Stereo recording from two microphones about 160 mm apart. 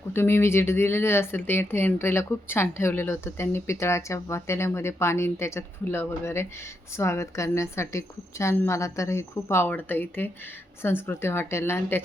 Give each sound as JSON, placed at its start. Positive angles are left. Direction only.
{"t": 0.1, "sound": "speech", "side_deg": 15}